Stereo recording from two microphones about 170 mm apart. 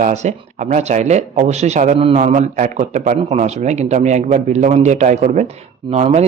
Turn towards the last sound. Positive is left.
turn(degrees=-40)  # may be behind; listen again after turning